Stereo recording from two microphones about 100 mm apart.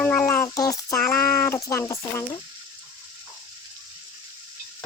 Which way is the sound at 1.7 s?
30° left (ahead or behind).